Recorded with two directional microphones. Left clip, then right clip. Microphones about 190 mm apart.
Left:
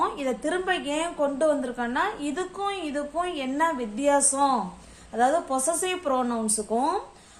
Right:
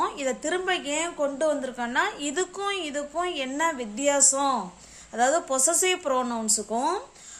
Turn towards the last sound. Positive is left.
turn(degrees=-40)  # may be behind; listen again after turning